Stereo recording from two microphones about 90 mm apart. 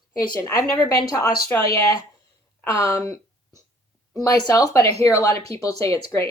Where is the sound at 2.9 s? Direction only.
40° left (ahead or behind).